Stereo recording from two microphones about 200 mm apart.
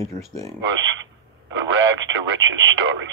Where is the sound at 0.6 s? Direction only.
70° right (ahead or behind).